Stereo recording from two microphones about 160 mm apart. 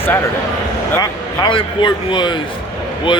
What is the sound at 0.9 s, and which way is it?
A man's voice, 25° left (ahead or behind).